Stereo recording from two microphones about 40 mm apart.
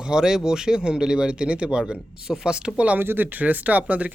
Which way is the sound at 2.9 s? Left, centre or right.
Right.